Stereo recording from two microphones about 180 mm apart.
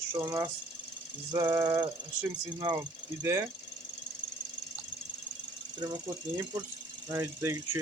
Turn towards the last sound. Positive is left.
turn(degrees=-15)  # may be behind; listen again after turning